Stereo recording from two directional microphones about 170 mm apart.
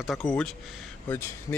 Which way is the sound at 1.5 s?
20° left (ahead or behind).